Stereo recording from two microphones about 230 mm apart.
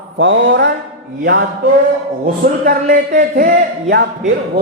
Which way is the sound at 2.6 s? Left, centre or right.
Right.